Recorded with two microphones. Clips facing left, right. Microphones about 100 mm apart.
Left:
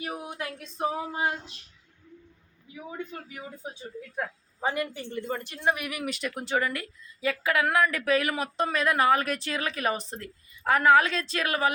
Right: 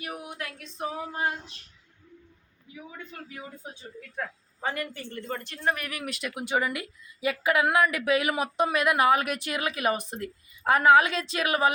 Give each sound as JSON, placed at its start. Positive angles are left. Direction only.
{"t": 0.0, "sound": "a sound", "side_deg": 25}
{"t": 4.1, "sound": "speech", "side_deg": 15}
{"t": 6.4, "sound": "a woman's voice", "side_deg": -15}